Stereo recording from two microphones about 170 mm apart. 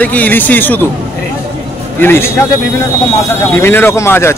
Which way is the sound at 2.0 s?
15° left (ahead or behind).